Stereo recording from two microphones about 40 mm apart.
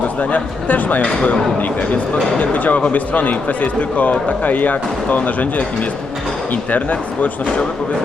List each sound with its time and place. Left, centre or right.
0.2 s a man's voice: left